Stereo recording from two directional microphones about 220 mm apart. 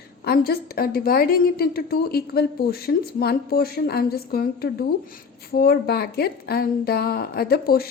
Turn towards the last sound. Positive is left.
turn(degrees=45)  # may be behind; listen again after turning